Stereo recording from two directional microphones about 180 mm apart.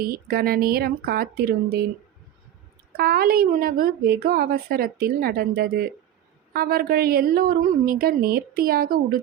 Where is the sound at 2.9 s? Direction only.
60° right (ahead or behind).